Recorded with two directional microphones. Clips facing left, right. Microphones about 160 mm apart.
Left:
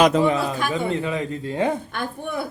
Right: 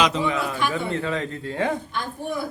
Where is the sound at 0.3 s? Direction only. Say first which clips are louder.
Left 4 dB; 35° left (ahead or behind).